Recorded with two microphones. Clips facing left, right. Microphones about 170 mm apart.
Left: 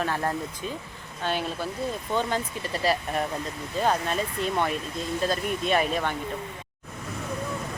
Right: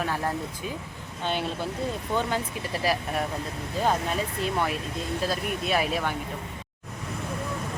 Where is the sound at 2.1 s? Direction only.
10° right (ahead or behind).